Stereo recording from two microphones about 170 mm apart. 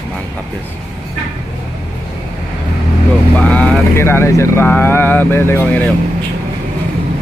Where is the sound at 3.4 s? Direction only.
10° left (ahead or behind).